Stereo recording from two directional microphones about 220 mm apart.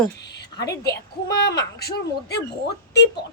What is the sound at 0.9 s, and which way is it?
A woman's voice, 45° left (ahead or behind).